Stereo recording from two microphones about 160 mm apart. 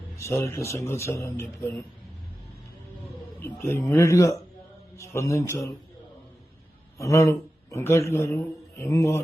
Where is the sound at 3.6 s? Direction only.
15° left (ahead or behind).